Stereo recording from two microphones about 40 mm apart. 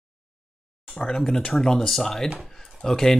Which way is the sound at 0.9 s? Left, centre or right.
Centre.